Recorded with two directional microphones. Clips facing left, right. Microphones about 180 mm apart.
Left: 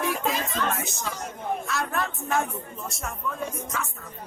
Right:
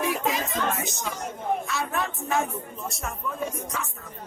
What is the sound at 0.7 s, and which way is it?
Music, centre (ahead or behind).